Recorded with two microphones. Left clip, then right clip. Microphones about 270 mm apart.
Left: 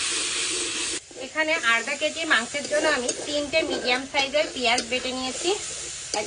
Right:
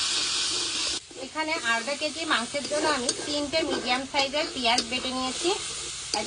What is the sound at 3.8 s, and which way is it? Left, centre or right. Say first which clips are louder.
Speech: left 2 dB; right.